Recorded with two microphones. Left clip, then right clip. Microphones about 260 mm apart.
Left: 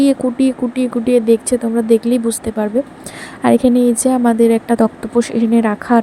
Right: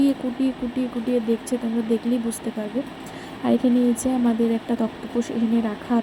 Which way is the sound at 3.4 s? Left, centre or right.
Left.